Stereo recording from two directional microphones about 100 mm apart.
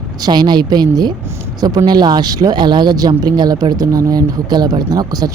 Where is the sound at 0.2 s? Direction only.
45° right (ahead or behind).